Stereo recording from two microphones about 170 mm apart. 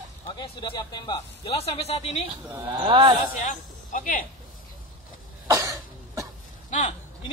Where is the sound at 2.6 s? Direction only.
30° right (ahead or behind).